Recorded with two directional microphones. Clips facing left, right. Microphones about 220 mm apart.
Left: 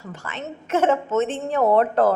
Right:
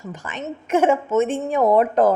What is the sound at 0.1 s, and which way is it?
A man's voice, 15° right (ahead or behind).